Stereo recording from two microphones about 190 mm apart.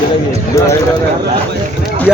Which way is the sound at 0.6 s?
15° left (ahead or behind).